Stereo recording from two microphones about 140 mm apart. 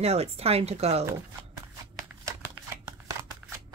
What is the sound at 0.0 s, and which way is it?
Speech, 45° right (ahead or behind).